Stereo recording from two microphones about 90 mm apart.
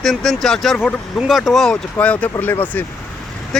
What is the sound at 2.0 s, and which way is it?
Speech, 15° left (ahead or behind).